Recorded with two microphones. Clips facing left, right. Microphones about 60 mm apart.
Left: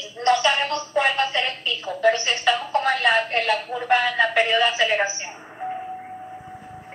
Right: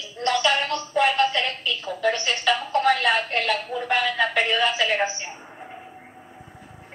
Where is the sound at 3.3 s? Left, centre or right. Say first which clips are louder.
Left 2 dB; centre.